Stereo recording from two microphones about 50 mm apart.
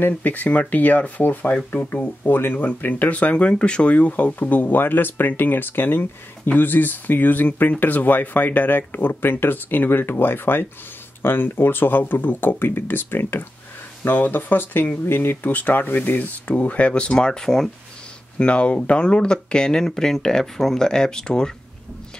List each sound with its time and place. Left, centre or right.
0.0 s speech: left
2.5 s speech: left; by 17.6 s centre
18.4 s speech: left